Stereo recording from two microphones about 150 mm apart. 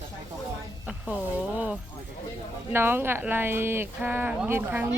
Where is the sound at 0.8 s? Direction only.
10° right (ahead or behind).